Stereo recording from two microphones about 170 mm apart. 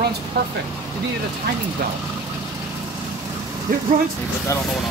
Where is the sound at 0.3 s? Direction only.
70° right (ahead or behind).